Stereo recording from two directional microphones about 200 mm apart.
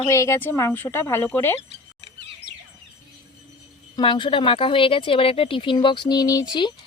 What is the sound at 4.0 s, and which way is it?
Speech, 25° left (ahead or behind).